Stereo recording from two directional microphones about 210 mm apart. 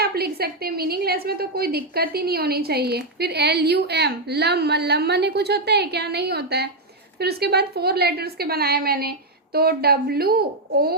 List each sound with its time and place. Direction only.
0.0 s a woman's voice: 50° right (ahead or behind)